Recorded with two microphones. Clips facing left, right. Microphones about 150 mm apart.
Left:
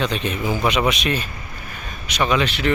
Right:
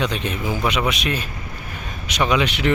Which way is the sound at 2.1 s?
20° right (ahead or behind).